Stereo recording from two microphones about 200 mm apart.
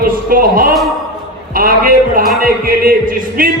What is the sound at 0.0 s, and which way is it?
A man's voice, 45° right (ahead or behind).